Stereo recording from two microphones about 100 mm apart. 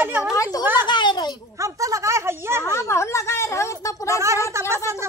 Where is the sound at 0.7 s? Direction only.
50° left (ahead or behind).